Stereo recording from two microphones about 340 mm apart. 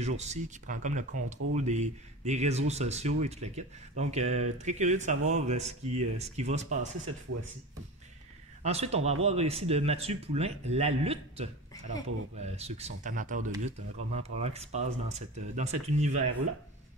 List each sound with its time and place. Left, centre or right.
0.0 s speech: centre
8.6 s speech: centre